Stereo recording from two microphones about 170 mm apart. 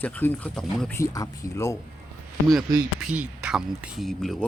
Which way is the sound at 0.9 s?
20° left (ahead or behind).